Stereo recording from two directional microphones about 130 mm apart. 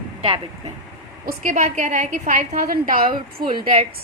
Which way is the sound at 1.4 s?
75° right (ahead or behind).